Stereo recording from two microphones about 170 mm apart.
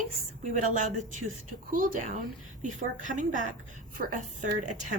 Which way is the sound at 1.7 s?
55° right (ahead or behind).